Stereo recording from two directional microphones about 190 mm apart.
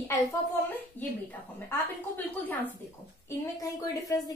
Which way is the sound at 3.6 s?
15° left (ahead or behind).